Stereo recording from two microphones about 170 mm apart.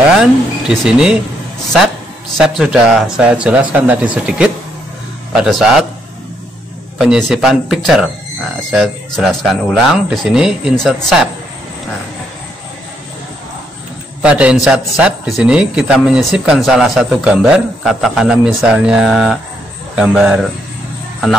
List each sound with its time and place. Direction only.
0.2 s a man's voice: 5° right (ahead or behind)
2.3 s a man's voice: centre (ahead or behind)
7.0 s a man's voice: centre (ahead or behind)
14.2 s a man's voice: 5° right (ahead or behind)